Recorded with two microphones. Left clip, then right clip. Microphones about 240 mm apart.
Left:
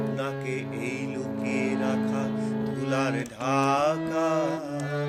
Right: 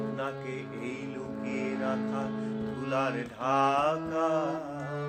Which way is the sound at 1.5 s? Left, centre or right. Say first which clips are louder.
Left 4 dB; left.